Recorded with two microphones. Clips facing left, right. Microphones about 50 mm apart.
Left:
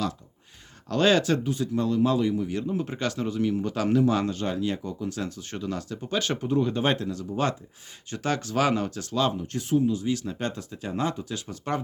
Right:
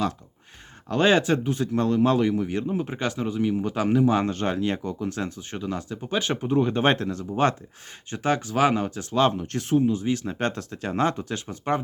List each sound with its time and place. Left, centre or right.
0.9 s speech: right
1.5 s speech: right
2.5 s speech: right
4.3 s speech: right
5.4 s speech: centre
6.5 s speech: right
8.1 s speech: right
9.1 s speech: right
9.4 s speech: right
11.4 s speech: right